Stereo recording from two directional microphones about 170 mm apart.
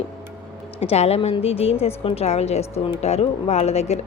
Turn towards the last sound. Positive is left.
turn(degrees=40)  # may be behind; listen again after turning